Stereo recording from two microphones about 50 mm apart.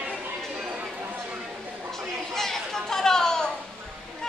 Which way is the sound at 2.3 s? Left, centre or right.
Centre.